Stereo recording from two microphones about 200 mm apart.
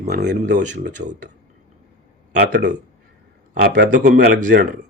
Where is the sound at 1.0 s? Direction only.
40° right (ahead or behind).